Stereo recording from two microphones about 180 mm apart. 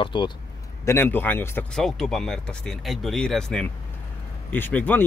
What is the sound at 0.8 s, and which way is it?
Speech, 15° left (ahead or behind).